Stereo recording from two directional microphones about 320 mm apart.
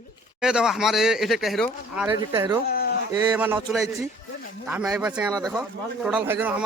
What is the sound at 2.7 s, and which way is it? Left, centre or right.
Speech, left.